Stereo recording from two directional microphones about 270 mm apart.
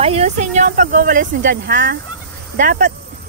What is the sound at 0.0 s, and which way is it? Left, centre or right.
Speech, right.